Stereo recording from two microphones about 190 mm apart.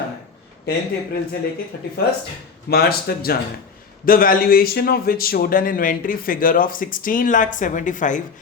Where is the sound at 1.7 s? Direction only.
60° left (ahead or behind).